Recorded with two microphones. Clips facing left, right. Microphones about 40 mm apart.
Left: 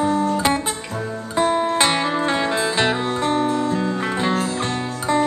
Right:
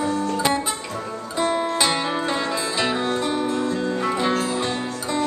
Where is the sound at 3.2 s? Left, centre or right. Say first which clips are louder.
Left 3 dB; left.